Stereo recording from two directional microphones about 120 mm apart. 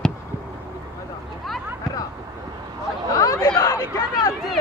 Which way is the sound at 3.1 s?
30° left (ahead or behind).